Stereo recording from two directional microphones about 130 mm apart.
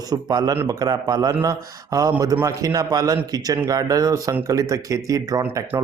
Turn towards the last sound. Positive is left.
turn(degrees=-20)  # may be behind; listen again after turning